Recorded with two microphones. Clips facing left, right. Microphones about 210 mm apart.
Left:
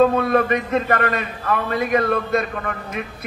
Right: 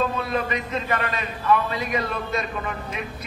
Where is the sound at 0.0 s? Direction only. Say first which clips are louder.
Left 9 dB; 55° left (ahead or behind).